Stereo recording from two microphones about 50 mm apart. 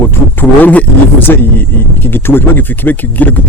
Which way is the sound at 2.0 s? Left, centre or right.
Left.